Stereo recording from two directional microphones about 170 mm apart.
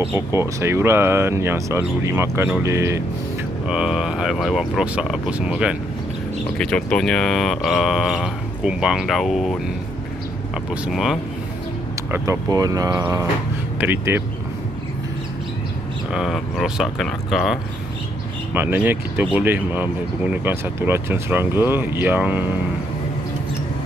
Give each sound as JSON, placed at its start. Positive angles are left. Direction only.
{"t": 0.0, "sound": "speech", "side_deg": -15}
{"t": 3.6, "sound": "speech", "side_deg": -5}
{"t": 6.6, "sound": "speech", "side_deg": 5}
{"t": 10.7, "sound": "speech", "side_deg": 0}
{"t": 12.1, "sound": "speech", "side_deg": -20}
{"t": 16.1, "sound": "speech", "side_deg": 0}
{"t": 18.5, "sound": "speech", "side_deg": -10}